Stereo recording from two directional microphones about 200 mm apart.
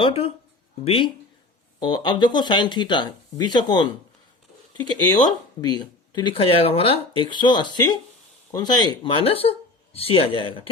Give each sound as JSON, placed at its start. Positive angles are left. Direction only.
{"t": 0.0, "sound": "speech", "side_deg": 30}